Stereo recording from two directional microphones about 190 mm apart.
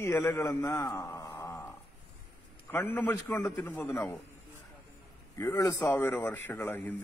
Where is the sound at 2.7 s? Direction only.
10° left (ahead or behind).